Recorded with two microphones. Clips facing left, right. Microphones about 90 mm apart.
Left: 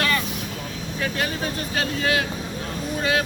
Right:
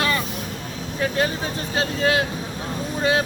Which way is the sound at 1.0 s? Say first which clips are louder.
Right 3 dB; 25° right (ahead or behind).